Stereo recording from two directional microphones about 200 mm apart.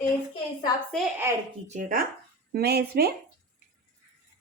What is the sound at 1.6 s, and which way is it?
Speech, 40° right (ahead or behind).